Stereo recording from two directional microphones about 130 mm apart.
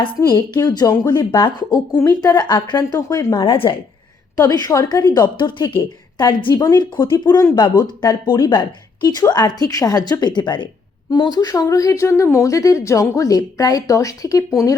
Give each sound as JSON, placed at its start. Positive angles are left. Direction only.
{"t": 0.3, "sound": "a woman's voice", "side_deg": 35}
{"t": 3.4, "sound": "speech", "side_deg": 40}
{"t": 4.4, "sound": "a woman's voice", "side_deg": 30}